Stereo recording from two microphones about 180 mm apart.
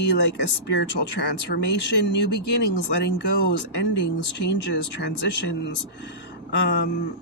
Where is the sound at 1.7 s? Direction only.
75° left (ahead or behind).